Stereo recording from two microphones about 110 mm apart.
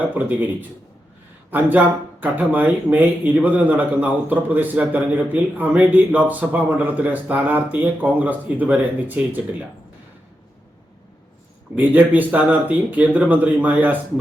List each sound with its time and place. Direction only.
0.0 s speech: 15° right (ahead or behind)
1.5 s speech: 15° right (ahead or behind)
11.8 s speech: 15° right (ahead or behind)